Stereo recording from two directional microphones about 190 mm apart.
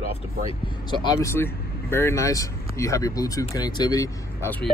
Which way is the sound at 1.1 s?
15° left (ahead or behind).